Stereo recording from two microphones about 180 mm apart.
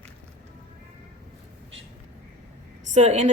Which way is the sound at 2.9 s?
40° right (ahead or behind).